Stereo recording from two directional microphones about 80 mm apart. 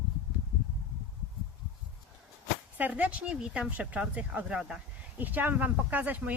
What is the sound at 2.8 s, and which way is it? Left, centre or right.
Speech, centre.